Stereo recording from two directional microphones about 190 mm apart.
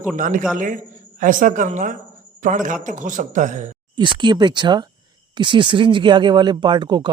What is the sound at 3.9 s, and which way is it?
Speech, 25° right (ahead or behind).